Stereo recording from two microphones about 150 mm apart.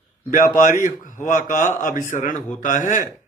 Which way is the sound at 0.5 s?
60° left (ahead or behind).